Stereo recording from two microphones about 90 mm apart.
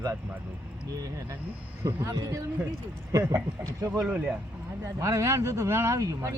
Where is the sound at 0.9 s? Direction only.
40° right (ahead or behind).